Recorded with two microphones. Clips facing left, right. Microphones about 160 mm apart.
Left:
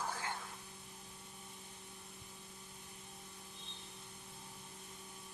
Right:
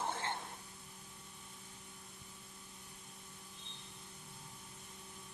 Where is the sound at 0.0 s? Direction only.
25° right (ahead or behind).